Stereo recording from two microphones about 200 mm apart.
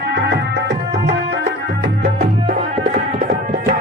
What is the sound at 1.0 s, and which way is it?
Music, 60° right (ahead or behind).